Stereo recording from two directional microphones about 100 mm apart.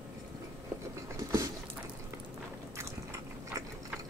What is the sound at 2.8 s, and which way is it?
Biting, 30° right (ahead or behind).